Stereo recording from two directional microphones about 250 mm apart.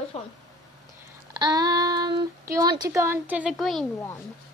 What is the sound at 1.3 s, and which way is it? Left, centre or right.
Speech, centre.